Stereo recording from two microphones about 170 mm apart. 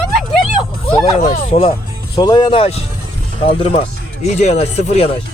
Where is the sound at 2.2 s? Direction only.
25° left (ahead or behind).